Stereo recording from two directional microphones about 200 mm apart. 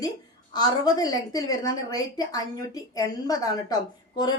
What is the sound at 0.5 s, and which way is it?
A woman's voice, 20° left (ahead or behind).